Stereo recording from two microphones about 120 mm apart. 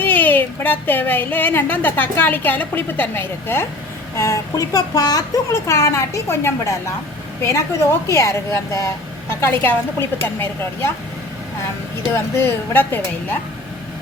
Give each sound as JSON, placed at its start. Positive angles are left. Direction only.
{"t": 0.0, "sound": "a woman's voice", "side_deg": 15}
{"t": 12.1, "sound": "speech", "side_deg": 20}